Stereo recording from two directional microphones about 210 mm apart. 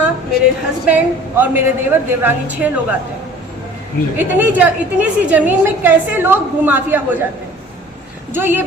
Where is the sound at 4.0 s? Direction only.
50° left (ahead or behind).